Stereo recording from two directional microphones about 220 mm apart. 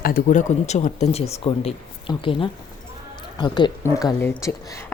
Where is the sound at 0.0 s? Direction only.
40° left (ahead or behind).